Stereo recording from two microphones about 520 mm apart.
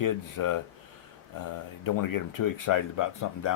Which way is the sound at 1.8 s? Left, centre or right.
Left.